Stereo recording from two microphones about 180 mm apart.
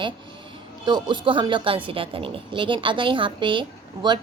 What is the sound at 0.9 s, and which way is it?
A woman's voice, 25° right (ahead or behind).